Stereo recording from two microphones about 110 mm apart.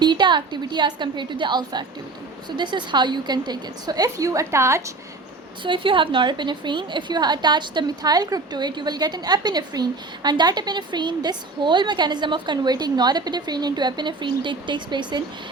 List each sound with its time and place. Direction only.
0.0 s a woman's voice: 45° right (ahead or behind); by 4.8 s 25° right (ahead or behind)
5.6 s a woman's voice: 50° right (ahead or behind)